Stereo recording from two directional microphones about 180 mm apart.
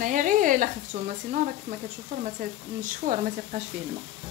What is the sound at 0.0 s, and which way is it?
Speech, 45° right (ahead or behind).